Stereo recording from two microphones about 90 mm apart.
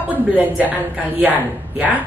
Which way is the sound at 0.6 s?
20° right (ahead or behind).